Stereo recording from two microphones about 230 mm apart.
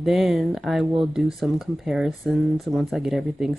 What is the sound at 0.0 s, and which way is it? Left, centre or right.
Speech, centre.